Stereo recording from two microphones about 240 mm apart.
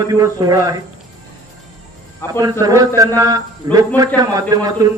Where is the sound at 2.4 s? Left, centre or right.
Centre.